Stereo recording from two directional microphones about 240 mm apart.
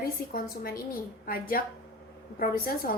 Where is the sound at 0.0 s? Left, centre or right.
Left.